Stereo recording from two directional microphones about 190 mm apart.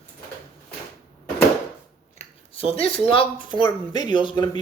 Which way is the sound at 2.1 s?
30° left (ahead or behind).